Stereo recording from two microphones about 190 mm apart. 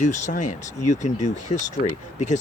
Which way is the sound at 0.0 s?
40° left (ahead or behind).